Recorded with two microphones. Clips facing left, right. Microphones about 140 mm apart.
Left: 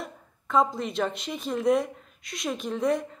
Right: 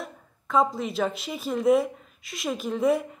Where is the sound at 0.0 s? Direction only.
Centre (ahead or behind).